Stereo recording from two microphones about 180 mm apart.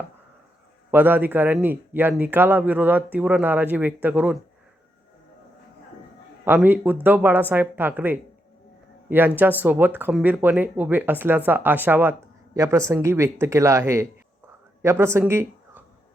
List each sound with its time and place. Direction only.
0.9 s a man's voice: 10° right (ahead or behind)
6.4 s a man's voice: 10° right (ahead or behind)